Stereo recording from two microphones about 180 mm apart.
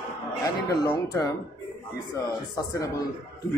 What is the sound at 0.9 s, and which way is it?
Speech, 15° left (ahead or behind).